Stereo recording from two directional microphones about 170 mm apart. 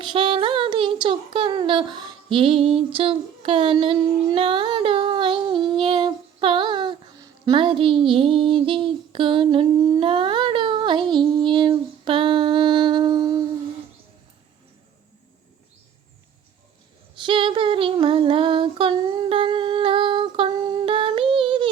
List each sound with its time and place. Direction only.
0.0 s a sound: 30° right (ahead or behind)
10.0 s child singing: 30° right (ahead or behind)
17.2 s female singing: 30° right (ahead or behind)